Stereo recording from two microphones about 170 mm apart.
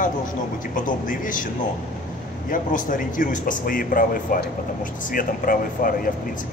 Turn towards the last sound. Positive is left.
turn(degrees=55)  # may be behind; listen again after turning